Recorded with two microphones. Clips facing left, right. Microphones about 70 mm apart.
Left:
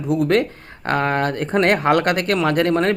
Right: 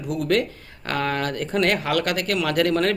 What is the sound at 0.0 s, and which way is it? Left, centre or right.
Speech, left.